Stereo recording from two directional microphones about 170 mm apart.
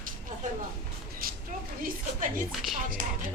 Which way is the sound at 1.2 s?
60° right (ahead or behind).